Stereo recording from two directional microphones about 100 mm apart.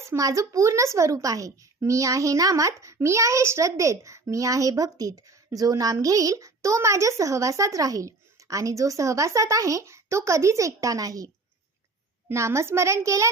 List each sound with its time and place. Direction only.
0.2 s a woman's voice: 35° right (ahead or behind)
12.3 s a child's voice: 25° right (ahead or behind)